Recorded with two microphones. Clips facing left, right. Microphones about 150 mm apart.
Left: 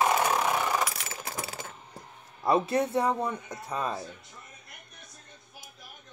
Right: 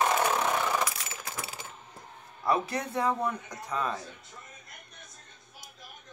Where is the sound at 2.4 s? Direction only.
25° left (ahead or behind).